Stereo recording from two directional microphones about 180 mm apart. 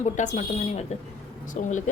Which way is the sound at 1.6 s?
40° left (ahead or behind).